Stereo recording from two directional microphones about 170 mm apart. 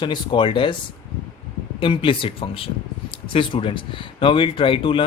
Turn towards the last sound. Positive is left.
turn(degrees=30)  # may be behind; listen again after turning